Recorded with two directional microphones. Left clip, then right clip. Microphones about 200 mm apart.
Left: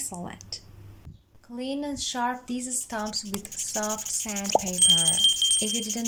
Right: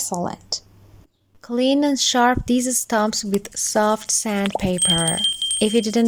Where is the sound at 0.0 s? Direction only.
35° right (ahead or behind).